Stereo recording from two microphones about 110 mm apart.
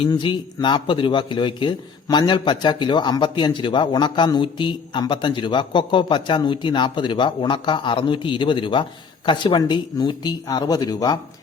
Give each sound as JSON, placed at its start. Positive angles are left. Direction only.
{"t": 0.2, "sound": "a man's voice", "side_deg": 45}